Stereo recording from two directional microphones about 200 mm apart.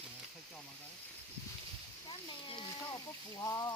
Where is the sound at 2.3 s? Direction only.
25° left (ahead or behind).